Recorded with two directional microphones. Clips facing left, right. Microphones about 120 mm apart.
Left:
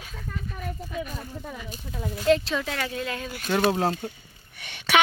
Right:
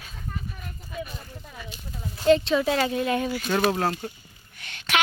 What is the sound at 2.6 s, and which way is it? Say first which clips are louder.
Speech: right 7 dB; 25° right (ahead or behind).